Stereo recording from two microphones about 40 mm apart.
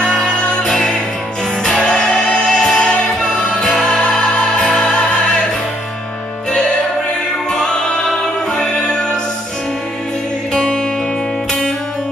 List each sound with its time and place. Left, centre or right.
0.7 s music: centre
7.5 s music: centre
10.5 s music: centre